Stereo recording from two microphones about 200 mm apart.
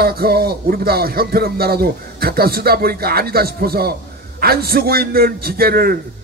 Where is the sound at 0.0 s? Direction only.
50° right (ahead or behind).